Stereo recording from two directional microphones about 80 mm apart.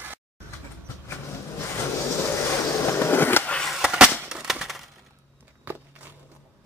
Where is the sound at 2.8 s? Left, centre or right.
Left.